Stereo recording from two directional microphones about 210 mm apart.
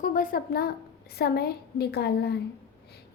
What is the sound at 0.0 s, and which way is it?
A woman's voice, 40° left (ahead or behind).